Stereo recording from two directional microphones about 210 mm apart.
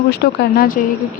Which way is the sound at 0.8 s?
40° left (ahead or behind).